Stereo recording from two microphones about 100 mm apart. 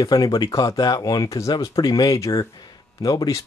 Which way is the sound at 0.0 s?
40° left (ahead or behind).